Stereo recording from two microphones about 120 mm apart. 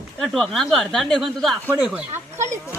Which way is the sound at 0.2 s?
Centre (ahead or behind).